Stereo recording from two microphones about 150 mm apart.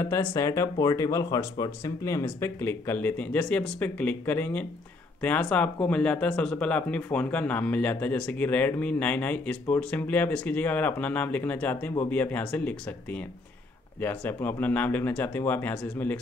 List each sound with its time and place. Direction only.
0.0 s speech: 15° left (ahead or behind)